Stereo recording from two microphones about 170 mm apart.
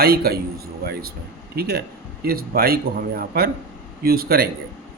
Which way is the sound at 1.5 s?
65° right (ahead or behind).